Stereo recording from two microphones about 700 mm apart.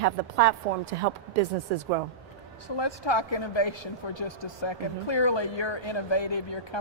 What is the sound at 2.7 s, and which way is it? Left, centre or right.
Speech, left.